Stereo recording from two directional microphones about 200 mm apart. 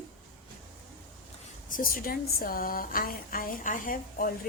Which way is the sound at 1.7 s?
45° left (ahead or behind).